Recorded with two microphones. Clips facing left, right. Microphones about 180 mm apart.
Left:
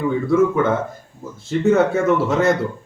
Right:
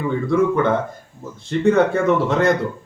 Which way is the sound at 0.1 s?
5° left (ahead or behind).